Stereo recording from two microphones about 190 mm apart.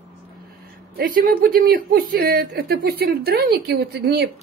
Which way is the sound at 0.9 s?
50° right (ahead or behind).